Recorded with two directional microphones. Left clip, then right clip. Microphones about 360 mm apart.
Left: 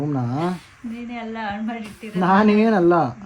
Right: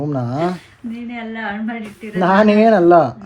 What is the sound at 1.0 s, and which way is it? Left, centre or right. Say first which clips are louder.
Speech: right 3 dB; centre.